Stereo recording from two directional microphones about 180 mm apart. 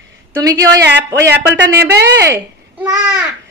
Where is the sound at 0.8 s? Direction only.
70° right (ahead or behind).